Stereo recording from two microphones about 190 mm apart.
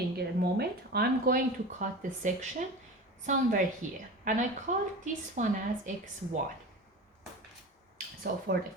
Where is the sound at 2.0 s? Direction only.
40° right (ahead or behind).